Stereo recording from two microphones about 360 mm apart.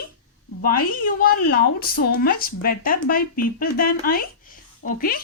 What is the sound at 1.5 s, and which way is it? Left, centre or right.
Speech, left.